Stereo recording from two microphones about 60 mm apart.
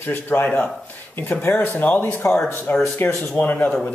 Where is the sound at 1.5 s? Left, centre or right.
Left.